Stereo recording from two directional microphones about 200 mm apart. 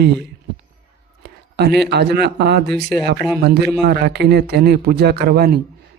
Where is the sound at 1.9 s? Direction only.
55° right (ahead or behind).